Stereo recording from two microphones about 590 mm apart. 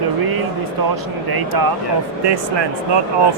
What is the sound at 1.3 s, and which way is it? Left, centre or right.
Speech, right.